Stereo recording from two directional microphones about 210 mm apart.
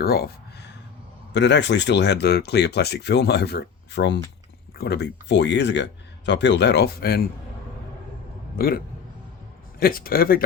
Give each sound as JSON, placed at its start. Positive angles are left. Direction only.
{"t": 0.0, "sound": "a sound", "side_deg": 50}
{"t": 1.3, "sound": "speech", "side_deg": 55}
{"t": 8.5, "sound": "a man's voice", "side_deg": 45}
{"t": 9.8, "sound": "speech", "side_deg": 45}